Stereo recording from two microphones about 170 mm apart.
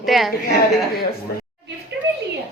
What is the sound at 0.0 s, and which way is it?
Speech, centre (ahead or behind).